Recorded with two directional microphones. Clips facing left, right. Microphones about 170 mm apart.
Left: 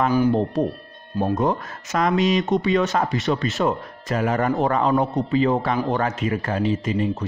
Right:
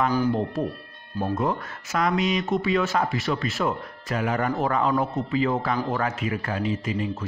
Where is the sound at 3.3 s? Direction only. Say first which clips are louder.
Left 4 dB; 25° left (ahead or behind).